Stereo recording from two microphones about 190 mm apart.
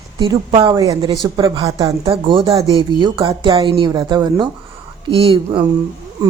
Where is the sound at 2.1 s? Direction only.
30° right (ahead or behind).